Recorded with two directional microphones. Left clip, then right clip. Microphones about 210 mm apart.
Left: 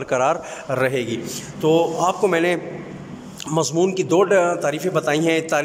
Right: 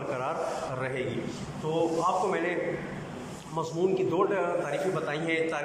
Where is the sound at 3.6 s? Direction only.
50° left (ahead or behind).